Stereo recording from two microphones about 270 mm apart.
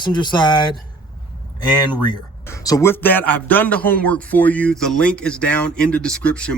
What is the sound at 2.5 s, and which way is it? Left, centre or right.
Speech, centre.